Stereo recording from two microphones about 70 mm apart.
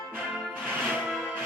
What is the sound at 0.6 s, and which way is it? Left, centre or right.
Music, right.